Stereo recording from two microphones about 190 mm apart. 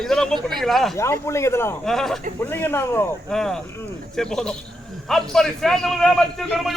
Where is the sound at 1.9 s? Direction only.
Centre (ahead or behind).